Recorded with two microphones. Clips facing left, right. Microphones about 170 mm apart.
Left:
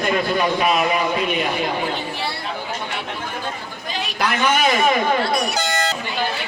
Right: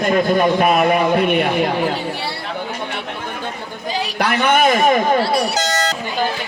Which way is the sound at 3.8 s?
35° right (ahead or behind).